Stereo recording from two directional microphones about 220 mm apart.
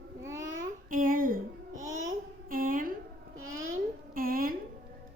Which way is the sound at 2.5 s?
40° right (ahead or behind).